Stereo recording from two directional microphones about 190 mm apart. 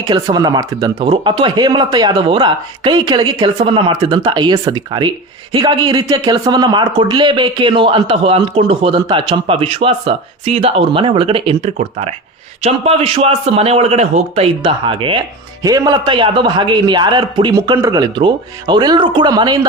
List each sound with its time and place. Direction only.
0.1 s a man's voice: 20° right (ahead or behind)